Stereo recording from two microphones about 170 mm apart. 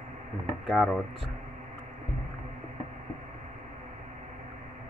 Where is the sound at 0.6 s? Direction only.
Centre (ahead or behind).